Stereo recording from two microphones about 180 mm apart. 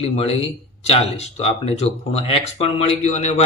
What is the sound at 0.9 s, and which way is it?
Speech, 35° left (ahead or behind).